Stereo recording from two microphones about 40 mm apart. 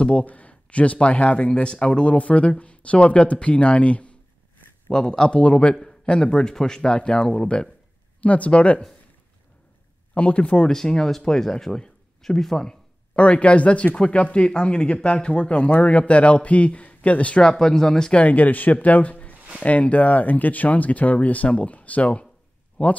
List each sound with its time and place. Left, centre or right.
0.2 s a sound: left
0.9 s speech: left
4.9 s speech: centre
5.4 s speech: left
8.2 s speech: left
10.1 s speech: left
10.7 s speech: centre
13.1 s speech: left
17.4 s speech: centre
18.1 s speech: left